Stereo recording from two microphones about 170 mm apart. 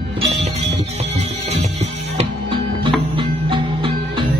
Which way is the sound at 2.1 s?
30° right (ahead or behind).